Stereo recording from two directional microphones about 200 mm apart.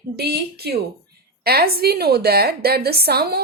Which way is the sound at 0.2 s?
55° right (ahead or behind).